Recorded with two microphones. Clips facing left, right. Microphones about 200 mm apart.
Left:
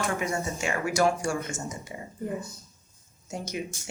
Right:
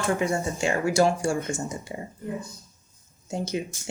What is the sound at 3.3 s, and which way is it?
Speech, 30° right (ahead or behind).